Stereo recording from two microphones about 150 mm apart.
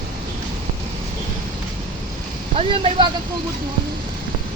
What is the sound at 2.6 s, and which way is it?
Speech, 40° right (ahead or behind).